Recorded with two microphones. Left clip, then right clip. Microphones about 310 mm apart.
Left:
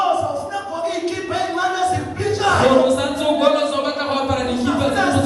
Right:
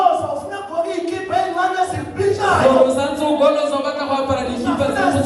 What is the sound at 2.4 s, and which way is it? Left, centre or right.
Music, centre.